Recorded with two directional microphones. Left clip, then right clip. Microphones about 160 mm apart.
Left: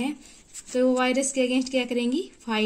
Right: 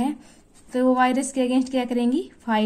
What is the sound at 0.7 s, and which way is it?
A woman's voice, 10° left (ahead or behind).